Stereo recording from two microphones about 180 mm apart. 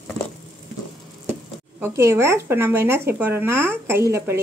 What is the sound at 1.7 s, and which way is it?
Speech, 15° right (ahead or behind).